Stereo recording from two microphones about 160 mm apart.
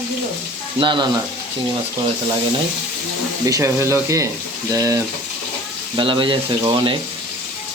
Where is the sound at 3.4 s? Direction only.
20° right (ahead or behind).